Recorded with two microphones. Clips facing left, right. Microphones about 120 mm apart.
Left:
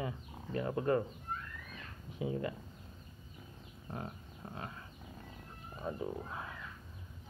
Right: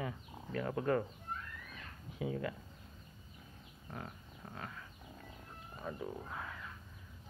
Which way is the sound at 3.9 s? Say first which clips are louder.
Left 3 dB; 25° left (ahead or behind).